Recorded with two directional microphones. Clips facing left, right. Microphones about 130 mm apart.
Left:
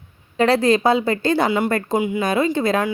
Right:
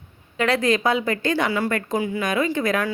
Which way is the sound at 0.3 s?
30° left (ahead or behind).